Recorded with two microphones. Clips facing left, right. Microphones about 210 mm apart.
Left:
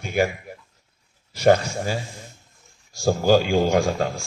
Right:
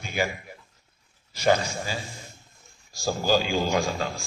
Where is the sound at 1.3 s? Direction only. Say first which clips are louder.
Left 5 dB; 60° left (ahead or behind).